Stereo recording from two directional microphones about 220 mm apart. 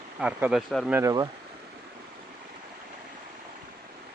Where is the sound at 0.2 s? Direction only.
5° right (ahead or behind).